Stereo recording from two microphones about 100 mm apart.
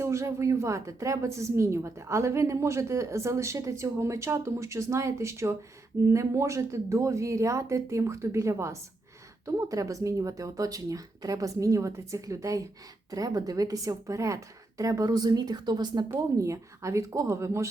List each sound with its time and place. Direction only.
0.0 s a woman's voice: 30° right (ahead or behind); by 16.0 s 45° right (ahead or behind)
16.4 s speech: 30° right (ahead or behind)